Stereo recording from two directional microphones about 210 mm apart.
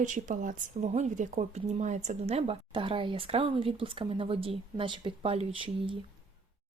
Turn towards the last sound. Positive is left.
turn(degrees=-25)  # may be behind; listen again after turning